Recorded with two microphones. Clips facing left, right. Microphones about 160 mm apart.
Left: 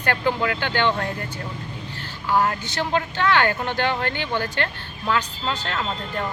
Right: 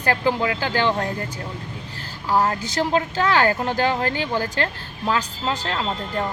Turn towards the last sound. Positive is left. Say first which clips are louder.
# right 2 dB
turn(degrees=-30)  # may be behind; listen again after turning